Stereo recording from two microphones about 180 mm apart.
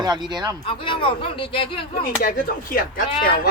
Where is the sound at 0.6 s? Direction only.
30° left (ahead or behind).